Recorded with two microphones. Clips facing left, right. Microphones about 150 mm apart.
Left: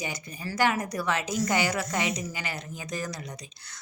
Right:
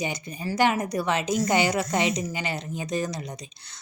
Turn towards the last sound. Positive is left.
turn(degrees=-25)  # may be behind; listen again after turning